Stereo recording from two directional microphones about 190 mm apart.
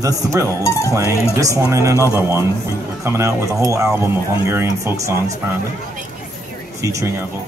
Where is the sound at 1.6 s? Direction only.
15° right (ahead or behind).